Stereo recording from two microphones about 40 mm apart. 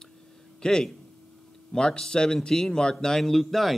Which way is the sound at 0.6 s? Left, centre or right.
Centre.